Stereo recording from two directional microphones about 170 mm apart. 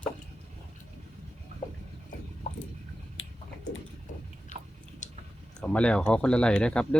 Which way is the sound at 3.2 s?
90° left.